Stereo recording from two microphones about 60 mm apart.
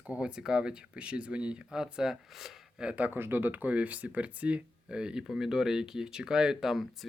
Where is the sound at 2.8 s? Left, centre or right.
Right.